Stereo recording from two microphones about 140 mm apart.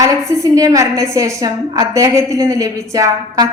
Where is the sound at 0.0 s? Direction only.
25° right (ahead or behind).